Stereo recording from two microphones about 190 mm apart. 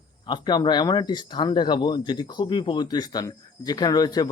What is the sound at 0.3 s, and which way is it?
Speech, 25° left (ahead or behind).